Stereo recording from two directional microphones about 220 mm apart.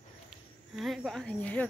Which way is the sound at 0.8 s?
Centre (ahead or behind).